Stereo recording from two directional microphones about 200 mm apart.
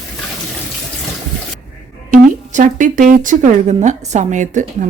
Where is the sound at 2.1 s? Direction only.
40° right (ahead or behind).